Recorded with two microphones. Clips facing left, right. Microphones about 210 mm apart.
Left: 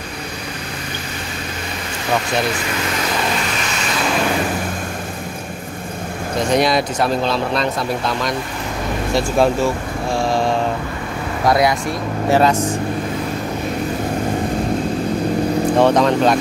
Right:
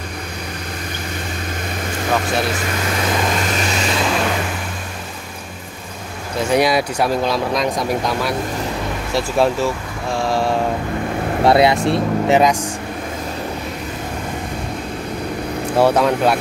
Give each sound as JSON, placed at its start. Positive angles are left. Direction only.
{"t": 6.5, "sound": "speech", "side_deg": -10}
{"t": 10.1, "sound": "mantra", "side_deg": -5}
{"t": 11.4, "sound": "speech", "side_deg": -25}
{"t": 12.4, "sound": "speech", "side_deg": -15}
{"t": 15.8, "sound": "speech", "side_deg": -10}